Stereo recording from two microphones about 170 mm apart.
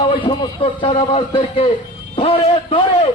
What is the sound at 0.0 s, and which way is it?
A man's voice, 30° left (ahead or behind).